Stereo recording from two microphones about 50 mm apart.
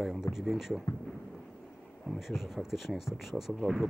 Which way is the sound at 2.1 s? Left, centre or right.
Centre.